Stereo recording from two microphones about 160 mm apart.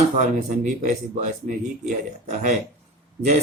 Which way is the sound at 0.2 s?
50° right (ahead or behind).